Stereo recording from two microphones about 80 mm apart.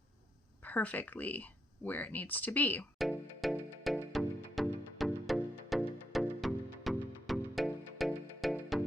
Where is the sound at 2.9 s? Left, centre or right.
Centre.